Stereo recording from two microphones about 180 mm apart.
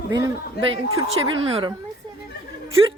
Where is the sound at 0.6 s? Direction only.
65° left (ahead or behind).